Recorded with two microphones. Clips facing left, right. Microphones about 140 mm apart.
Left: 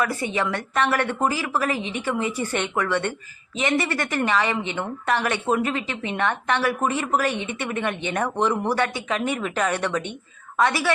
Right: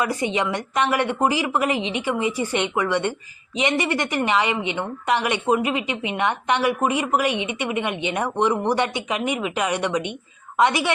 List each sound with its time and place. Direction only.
0.0 s a woman's voice: 20° right (ahead or behind)